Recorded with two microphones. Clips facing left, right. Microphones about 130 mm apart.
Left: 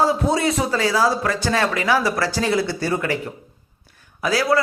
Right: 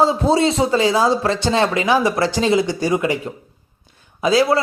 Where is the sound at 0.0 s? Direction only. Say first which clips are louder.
Right 3 dB; 25° right (ahead or behind).